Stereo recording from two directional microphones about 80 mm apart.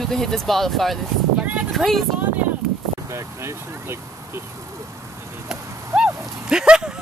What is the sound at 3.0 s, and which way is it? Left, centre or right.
Speech, right.